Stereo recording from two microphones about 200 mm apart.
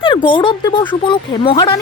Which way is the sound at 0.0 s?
25° left (ahead or behind).